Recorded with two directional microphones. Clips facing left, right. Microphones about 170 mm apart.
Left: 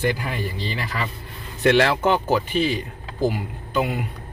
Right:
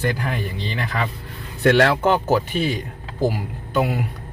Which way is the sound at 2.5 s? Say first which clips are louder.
Left 1 dB; 50° right (ahead or behind).